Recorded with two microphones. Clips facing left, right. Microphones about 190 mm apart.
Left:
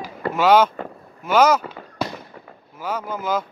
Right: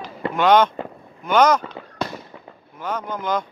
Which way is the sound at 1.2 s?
5° left (ahead or behind).